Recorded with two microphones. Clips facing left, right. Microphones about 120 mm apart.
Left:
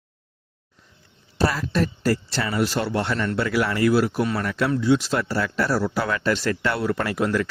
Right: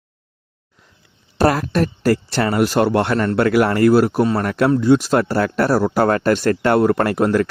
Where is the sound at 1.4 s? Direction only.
55° right (ahead or behind).